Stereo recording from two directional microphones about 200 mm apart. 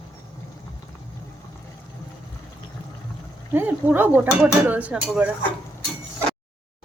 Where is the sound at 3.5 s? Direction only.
10° right (ahead or behind).